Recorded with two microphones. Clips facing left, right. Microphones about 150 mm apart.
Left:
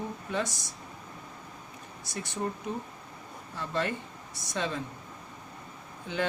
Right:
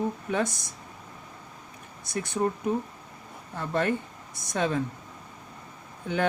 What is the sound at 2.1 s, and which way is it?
Speech, 55° right (ahead or behind).